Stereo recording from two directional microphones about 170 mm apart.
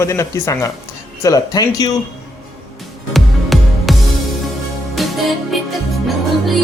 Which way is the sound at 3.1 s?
Centre (ahead or behind).